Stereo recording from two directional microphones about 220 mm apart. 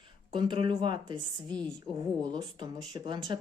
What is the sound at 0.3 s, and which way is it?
A woman's voice, 20° right (ahead or behind).